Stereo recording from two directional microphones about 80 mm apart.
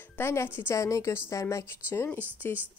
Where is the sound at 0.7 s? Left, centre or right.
Left.